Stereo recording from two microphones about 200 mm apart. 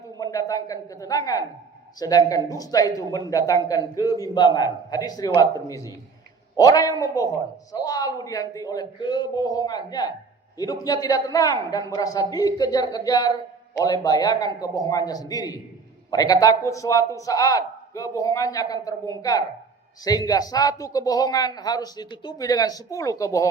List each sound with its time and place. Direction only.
0.2 s a man's voice: 15° left (ahead or behind)